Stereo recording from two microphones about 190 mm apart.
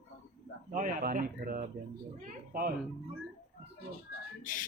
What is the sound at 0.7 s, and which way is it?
Speech, 45° right (ahead or behind).